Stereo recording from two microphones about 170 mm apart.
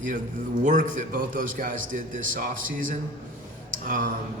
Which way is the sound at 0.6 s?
50° right (ahead or behind).